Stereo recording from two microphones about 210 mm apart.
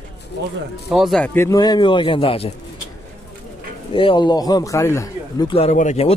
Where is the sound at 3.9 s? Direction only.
25° left (ahead or behind).